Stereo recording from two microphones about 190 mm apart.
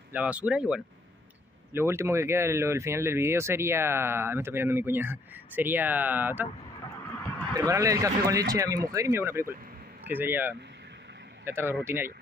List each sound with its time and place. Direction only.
0.1 s speech: 5° right (ahead or behind)
7.5 s speech: 15° right (ahead or behind)